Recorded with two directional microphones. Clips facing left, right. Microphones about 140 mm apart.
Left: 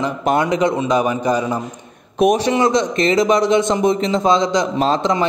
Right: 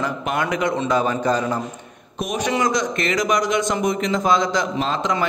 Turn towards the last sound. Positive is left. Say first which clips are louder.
# left 5 dB
turn(degrees=35)  # may be behind; listen again after turning